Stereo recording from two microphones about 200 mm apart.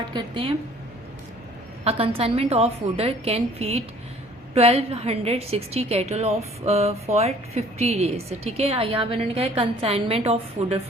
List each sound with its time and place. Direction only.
0.1 s a woman's voice: 25° right (ahead or behind)
1.8 s a woman's voice: 30° right (ahead or behind)